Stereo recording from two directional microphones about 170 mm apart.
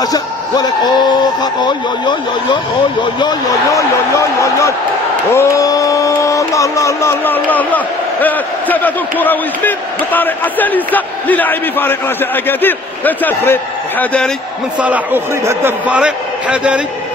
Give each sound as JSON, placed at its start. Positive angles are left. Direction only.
{"t": 0.0, "sound": "speech", "side_deg": 25}
{"t": 4.4, "sound": "a sound", "side_deg": 20}
{"t": 14.8, "sound": "a man's voice", "side_deg": -10}